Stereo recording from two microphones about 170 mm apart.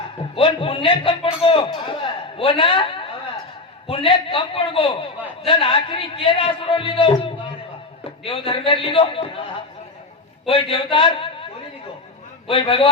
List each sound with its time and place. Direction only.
0.3 s a man's voice: 30° left (ahead or behind)
10.5 s a man's voice: 30° left (ahead or behind)
12.5 s a man's voice: 30° left (ahead or behind)